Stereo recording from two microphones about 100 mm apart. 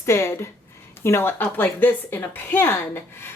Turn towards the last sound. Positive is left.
turn(degrees=25)  # may be behind; listen again after turning